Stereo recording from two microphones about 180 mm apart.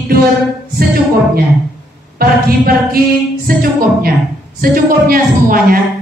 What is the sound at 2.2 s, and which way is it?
A man's voice, 55° right (ahead or behind).